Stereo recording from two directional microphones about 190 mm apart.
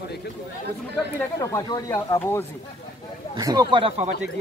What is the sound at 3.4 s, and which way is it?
Speech, 20° right (ahead or behind).